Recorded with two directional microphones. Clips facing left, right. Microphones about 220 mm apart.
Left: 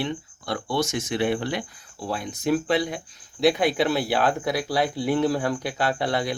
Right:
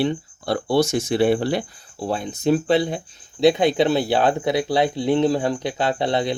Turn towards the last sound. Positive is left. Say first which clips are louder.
# right 3 dB
turn(degrees=-20)  # may be behind; listen again after turning